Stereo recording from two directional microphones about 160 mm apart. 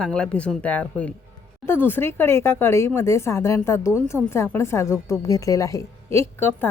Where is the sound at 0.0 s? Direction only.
5° left (ahead or behind).